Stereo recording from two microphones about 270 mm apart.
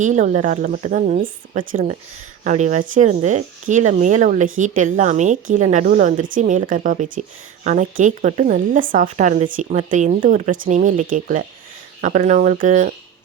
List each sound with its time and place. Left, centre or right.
0.0 s speech: right